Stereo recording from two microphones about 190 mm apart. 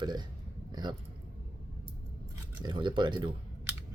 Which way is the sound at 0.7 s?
20° right (ahead or behind).